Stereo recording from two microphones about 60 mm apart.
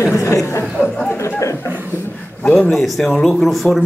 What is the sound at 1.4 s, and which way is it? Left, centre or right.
Chuckle, left.